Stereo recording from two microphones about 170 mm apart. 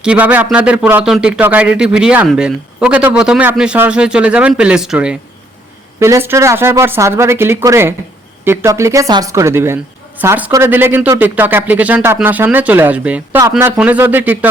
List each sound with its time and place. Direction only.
0.0 s speech: 5° right (ahead or behind)
6.0 s speech: 15° right (ahead or behind)